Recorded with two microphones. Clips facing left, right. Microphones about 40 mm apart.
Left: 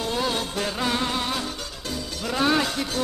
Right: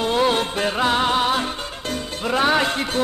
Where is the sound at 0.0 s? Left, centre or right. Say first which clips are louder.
Right 7 dB; right.